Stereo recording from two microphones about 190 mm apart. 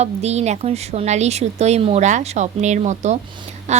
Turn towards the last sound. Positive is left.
turn(degrees=-35)  # may be behind; listen again after turning